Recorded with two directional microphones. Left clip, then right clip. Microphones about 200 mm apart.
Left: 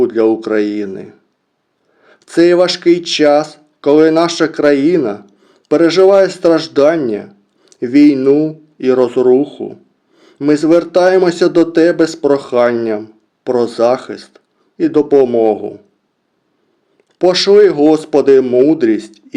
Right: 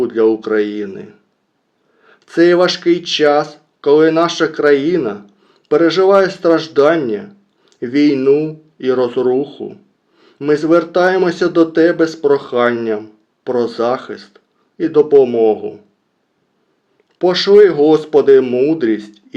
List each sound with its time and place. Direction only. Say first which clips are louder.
0.2 s speech: left 1 dB; 45° left (ahead or behind)
17.2 s speech: left 1 dB; 45° left (ahead or behind)